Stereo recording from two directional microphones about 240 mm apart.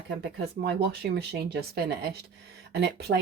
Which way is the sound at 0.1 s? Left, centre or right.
Right.